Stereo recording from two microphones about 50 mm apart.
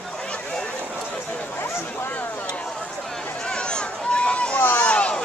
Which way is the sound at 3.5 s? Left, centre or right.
Centre.